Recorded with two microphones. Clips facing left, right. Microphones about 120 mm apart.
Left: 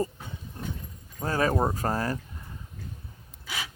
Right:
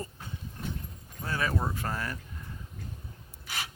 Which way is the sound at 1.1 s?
40° left (ahead or behind).